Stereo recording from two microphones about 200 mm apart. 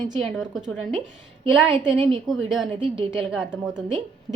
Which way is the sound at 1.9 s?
25° right (ahead or behind).